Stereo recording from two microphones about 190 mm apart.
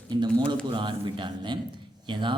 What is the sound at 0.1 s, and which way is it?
Speech, 20° right (ahead or behind).